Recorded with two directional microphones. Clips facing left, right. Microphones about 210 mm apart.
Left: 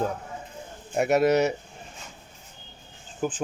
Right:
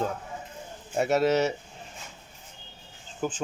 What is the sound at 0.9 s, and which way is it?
Speech, 15° left (ahead or behind).